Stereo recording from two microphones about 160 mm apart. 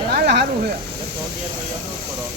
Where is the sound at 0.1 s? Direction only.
90° right.